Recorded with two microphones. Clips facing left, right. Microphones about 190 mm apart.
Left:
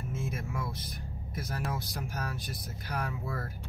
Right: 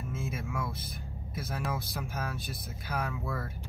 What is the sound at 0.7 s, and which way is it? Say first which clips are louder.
Speech: left 1 dB; centre (ahead or behind).